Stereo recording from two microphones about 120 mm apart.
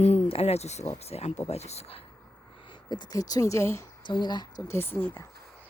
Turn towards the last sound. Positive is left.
turn(degrees=20)  # may be behind; listen again after turning